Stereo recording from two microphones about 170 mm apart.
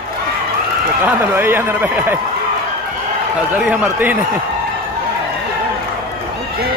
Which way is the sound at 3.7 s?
10° right (ahead or behind).